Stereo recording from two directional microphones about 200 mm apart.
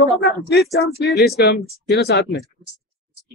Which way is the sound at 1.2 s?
55° left (ahead or behind).